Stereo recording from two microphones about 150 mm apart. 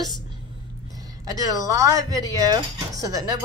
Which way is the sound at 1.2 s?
25° right (ahead or behind).